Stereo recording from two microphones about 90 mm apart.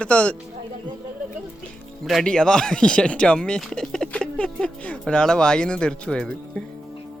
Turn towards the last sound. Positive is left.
turn(degrees=10)  # may be behind; listen again after turning